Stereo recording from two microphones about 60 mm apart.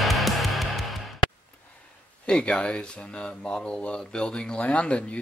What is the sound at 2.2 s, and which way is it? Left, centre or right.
Speech, centre.